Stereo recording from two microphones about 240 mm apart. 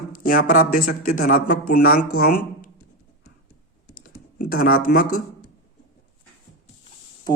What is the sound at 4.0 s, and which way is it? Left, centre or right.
Computer keyboard, left.